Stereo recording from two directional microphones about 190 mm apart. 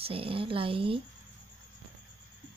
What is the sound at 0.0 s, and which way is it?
Speech, 30° right (ahead or behind).